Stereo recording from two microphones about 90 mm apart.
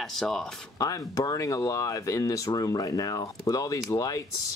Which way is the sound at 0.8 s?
40° left (ahead or behind).